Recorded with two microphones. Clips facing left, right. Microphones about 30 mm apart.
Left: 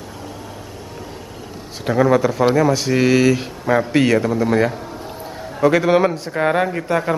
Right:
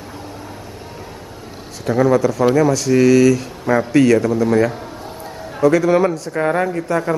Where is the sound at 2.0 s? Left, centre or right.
Left.